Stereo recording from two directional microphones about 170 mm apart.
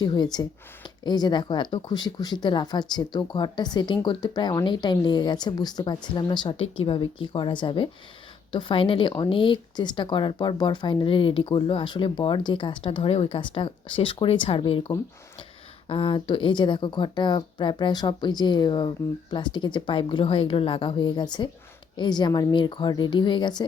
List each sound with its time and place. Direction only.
0.0 s speech: 25° left (ahead or behind)